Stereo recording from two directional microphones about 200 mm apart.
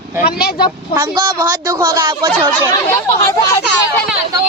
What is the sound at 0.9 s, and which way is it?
A woman's voice, 20° right (ahead or behind).